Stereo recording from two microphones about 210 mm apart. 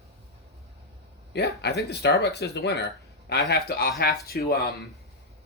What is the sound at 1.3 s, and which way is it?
Speech, 50° left (ahead or behind).